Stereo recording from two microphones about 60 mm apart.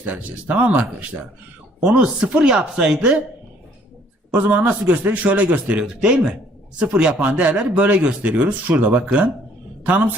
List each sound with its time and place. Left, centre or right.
0.0 s speech: right
1.8 s speech: centre
4.3 s speech: right
5.8 s speech: centre